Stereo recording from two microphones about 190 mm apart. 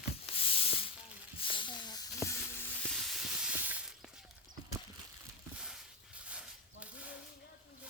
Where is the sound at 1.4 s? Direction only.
25° left (ahead or behind).